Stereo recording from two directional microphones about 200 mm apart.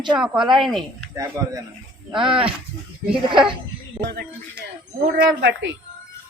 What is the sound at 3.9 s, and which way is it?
A woman's voice, 60° right (ahead or behind).